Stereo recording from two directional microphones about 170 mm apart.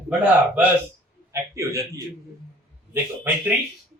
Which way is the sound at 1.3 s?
15° right (ahead or behind).